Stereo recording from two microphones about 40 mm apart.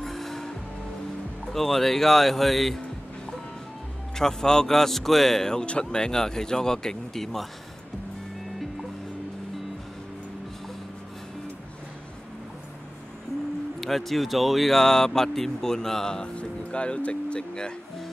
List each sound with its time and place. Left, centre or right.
0.0 s music: centre
1.5 s speech: centre
4.2 s speech: centre
13.7 s speech: centre
14.8 s speech: centre
16.3 s speech: left